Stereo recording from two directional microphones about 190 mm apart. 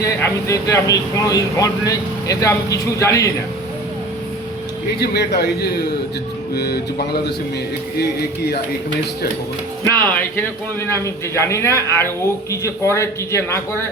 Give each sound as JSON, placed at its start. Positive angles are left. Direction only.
{"t": 0.0, "sound": "speech", "side_deg": 15}
{"t": 4.9, "sound": "a man's voice", "side_deg": 60}
{"t": 9.8, "sound": "speech", "side_deg": 10}